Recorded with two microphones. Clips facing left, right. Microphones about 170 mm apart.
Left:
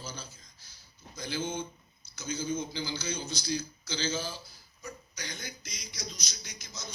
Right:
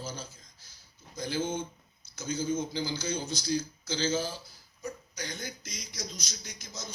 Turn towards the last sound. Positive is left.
turn(degrees=-50)  # may be behind; listen again after turning